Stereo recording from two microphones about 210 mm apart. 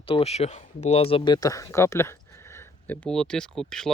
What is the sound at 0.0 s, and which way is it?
Speech, 30° left (ahead or behind).